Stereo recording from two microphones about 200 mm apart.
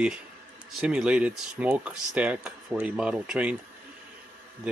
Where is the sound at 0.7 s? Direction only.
5° right (ahead or behind).